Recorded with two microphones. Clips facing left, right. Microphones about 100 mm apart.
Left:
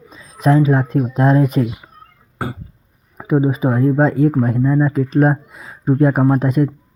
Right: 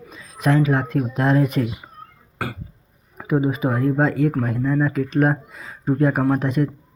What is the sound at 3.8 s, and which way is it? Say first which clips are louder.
Speech: left 5 dB; 35° left (ahead or behind).